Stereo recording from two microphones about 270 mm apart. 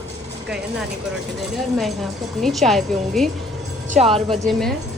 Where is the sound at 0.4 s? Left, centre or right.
Centre.